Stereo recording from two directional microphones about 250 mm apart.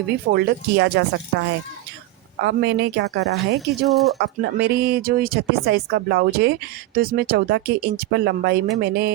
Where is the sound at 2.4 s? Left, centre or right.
Right.